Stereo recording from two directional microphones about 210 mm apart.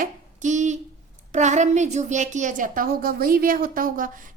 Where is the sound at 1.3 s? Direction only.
35° right (ahead or behind).